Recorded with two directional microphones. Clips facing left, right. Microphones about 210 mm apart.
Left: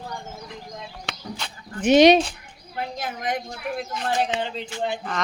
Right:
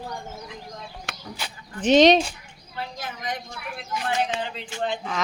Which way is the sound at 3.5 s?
35° left (ahead or behind).